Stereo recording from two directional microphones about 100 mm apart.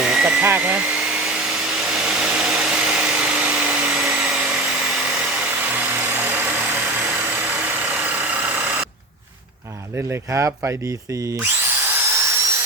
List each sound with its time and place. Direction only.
0.0 s a sound: 10° right (ahead or behind)
10.1 s speech: 30° right (ahead or behind)
12.0 s helicopter: 25° right (ahead or behind)